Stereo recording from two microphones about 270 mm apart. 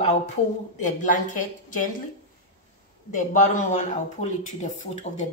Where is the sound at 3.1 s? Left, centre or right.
Left.